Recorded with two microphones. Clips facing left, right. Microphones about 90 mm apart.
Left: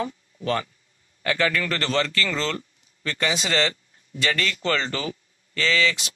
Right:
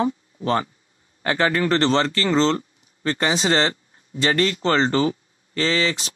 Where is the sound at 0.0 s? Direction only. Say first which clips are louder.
Right 6 dB; 30° right (ahead or behind).